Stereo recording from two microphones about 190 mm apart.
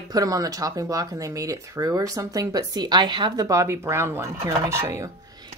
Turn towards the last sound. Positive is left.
turn(degrees=-15)  # may be behind; listen again after turning